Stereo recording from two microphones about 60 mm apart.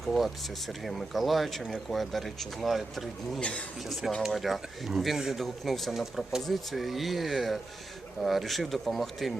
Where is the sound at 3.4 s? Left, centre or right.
Centre.